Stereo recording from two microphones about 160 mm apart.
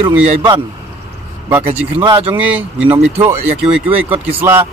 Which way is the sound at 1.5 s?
10° right (ahead or behind).